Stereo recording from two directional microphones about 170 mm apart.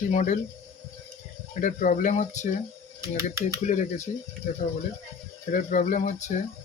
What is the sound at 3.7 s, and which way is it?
Speech, 50° left (ahead or behind).